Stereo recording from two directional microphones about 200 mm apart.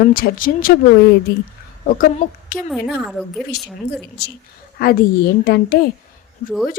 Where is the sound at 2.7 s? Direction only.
Centre (ahead or behind).